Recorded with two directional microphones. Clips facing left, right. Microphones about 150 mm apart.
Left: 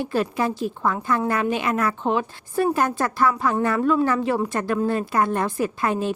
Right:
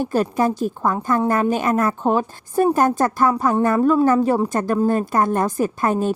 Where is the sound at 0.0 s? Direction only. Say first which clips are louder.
Right 4 dB; 45° right (ahead or behind).